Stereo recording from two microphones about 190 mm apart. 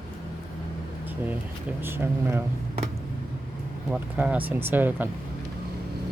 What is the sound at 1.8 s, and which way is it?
Speech, 10° right (ahead or behind).